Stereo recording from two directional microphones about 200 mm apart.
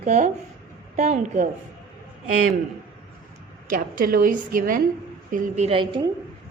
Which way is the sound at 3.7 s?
45° right (ahead or behind).